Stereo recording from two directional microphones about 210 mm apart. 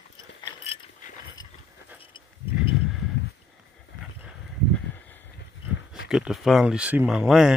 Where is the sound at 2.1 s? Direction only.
20° left (ahead or behind).